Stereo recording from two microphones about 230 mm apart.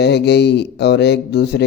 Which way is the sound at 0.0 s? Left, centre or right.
Left.